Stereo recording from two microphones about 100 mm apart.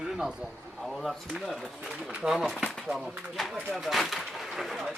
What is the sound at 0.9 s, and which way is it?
Speech, centre (ahead or behind).